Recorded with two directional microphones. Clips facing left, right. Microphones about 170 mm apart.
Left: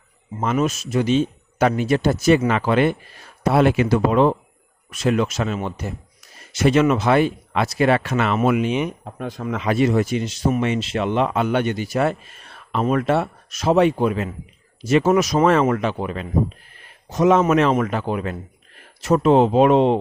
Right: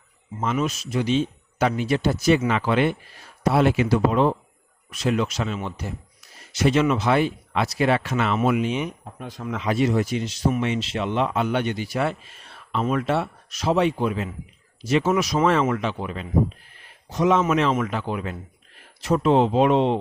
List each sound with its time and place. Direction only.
0.4 s speech: 45° left (ahead or behind)
3.4 s speech: 55° left (ahead or behind)
4.9 s speech: 50° left (ahead or behind)